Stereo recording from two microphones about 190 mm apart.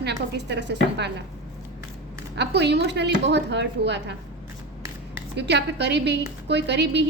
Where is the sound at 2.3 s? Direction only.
65° right (ahead or behind).